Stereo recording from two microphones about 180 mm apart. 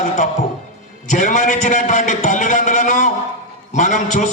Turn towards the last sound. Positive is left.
turn(degrees=45)  # may be behind; listen again after turning